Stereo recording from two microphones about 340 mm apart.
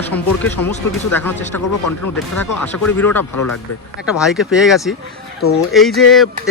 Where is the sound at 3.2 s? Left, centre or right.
Left.